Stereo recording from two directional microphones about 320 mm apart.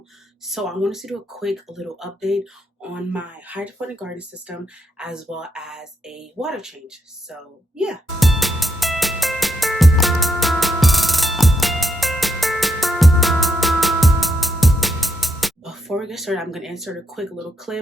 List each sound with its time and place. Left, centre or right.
0.4 s speech: centre
7.8 s music: centre